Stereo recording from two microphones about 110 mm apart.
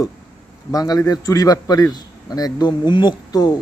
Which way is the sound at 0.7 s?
35° left (ahead or behind).